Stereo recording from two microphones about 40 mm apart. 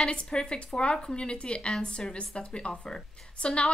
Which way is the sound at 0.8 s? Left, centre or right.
Left.